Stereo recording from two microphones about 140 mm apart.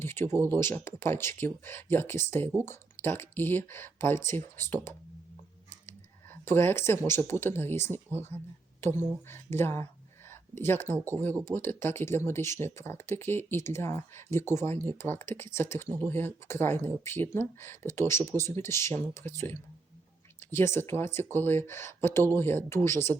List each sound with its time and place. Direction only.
0.0 s speech: 15° left (ahead or behind)
6.4 s speech: 15° left (ahead or behind)